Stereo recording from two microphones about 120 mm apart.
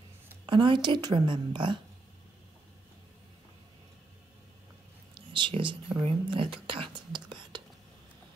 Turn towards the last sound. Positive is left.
turn(degrees=-40)  # may be behind; listen again after turning